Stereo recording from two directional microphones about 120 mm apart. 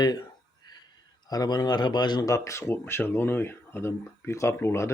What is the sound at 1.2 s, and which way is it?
Speech, 35° left (ahead or behind).